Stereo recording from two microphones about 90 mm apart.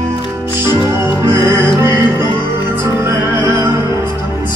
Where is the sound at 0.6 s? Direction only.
55° left (ahead or behind).